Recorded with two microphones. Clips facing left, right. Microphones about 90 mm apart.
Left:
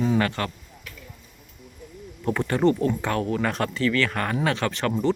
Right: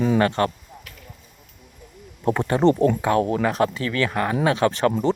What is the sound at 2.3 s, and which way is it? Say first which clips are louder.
Speech: right 3 dB; 20° right (ahead or behind).